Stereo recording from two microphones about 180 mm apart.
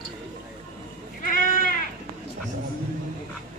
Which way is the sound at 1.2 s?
50° left (ahead or behind).